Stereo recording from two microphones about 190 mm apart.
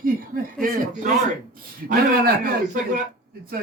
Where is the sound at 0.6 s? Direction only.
45° right (ahead or behind).